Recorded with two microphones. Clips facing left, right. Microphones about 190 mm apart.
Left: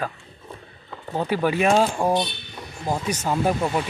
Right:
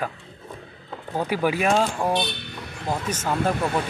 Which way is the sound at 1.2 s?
10° right (ahead or behind).